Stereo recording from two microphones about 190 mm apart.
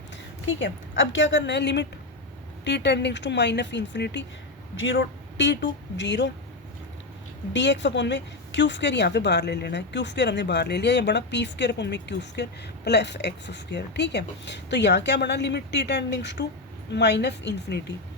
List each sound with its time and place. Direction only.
0.4 s speech: 75° left (ahead or behind)
4.8 s speech: 75° left (ahead or behind)
7.5 s speech: 70° left (ahead or behind)